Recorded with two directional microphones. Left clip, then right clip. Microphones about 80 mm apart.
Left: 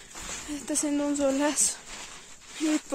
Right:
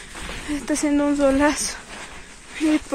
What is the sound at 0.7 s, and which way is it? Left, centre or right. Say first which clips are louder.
Speech: right 7 dB; left.